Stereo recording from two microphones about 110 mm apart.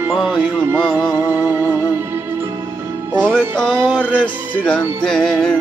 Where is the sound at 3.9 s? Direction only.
10° left (ahead or behind).